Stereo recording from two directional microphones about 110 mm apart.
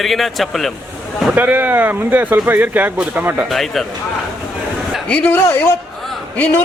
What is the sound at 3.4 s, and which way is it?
Speech, centre (ahead or behind).